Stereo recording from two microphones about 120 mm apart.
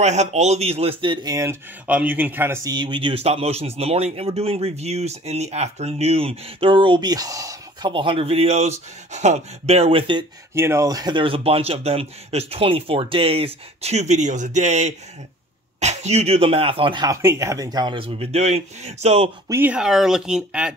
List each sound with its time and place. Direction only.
0.0 s speech: 70° right (ahead or behind); by 1.3 s 45° right (ahead or behind)
1.3 s speech: 25° right (ahead or behind)
1.9 s speech: 15° right (ahead or behind)
2.6 s speech: 40° right (ahead or behind)
7.9 s speech: 45° right (ahead or behind)
10.5 s speech: 20° right (ahead or behind); by 17.0 s 50° right (ahead or behind)
17.0 s speech: 25° right (ahead or behind)
17.9 s speech: 55° right (ahead or behind)
19.0 s speech: 55° right (ahead or behind)
19.5 s speech: 15° right (ahead or behind)